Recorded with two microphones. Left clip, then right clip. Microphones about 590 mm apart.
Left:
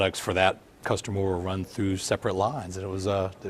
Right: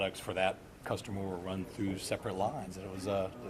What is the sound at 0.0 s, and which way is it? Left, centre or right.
Speech, left.